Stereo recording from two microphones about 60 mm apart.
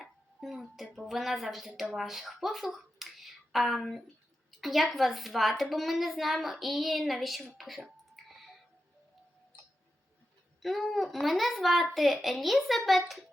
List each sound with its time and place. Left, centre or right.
0.0 s music: centre
0.9 s a woman's voice: centre
8.1 s music: centre
10.6 s a woman's voice: centre